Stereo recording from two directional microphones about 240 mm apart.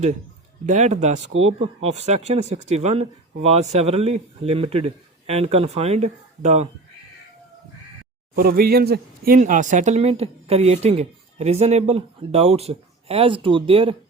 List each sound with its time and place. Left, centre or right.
0.6 s speech: right
8.4 s speech: right